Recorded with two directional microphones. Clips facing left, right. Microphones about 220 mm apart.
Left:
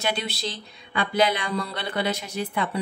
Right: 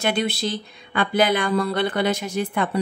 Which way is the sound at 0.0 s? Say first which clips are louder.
Right 6 dB; 50° right (ahead or behind).